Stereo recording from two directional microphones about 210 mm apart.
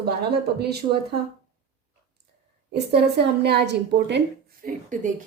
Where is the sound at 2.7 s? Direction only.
50° right (ahead or behind).